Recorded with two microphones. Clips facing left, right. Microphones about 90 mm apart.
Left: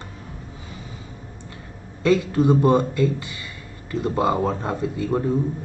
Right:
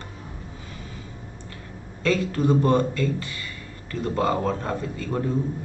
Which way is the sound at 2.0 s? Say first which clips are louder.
Left 4 dB; 15° left (ahead or behind).